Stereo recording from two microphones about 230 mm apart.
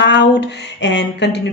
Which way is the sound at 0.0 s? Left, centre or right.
Left.